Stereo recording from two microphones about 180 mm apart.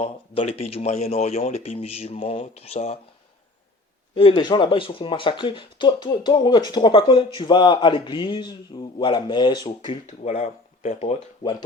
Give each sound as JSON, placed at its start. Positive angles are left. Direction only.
{"t": 0.0, "sound": "speech", "side_deg": 35}
{"t": 4.1, "sound": "speech", "side_deg": 30}
{"t": 10.1, "sound": "speech", "side_deg": 40}